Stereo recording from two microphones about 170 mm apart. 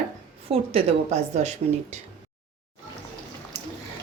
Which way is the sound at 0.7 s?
40° right (ahead or behind).